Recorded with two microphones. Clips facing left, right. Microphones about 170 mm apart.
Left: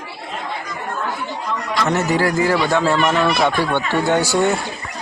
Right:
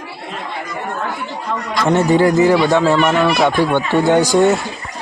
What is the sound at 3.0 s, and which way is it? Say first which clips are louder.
Speech: right 3 dB; 5° right (ahead or behind).